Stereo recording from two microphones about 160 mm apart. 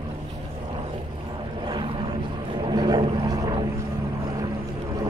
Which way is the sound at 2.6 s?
25° right (ahead or behind).